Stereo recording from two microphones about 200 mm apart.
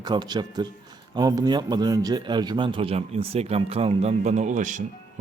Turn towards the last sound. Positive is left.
turn(degrees=-40)  # may be behind; listen again after turning